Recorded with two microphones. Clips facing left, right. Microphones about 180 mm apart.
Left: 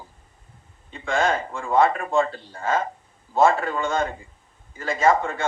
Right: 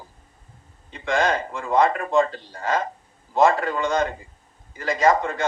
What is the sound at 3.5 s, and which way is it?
A man's voice, 40° right (ahead or behind).